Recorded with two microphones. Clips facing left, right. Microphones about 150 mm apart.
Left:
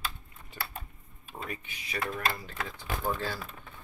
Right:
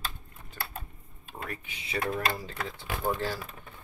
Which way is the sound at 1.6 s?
25° right (ahead or behind).